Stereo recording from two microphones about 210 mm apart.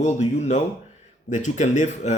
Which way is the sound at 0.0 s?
30° left (ahead or behind).